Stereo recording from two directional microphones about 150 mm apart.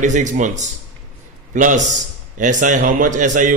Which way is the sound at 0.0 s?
55° right (ahead or behind).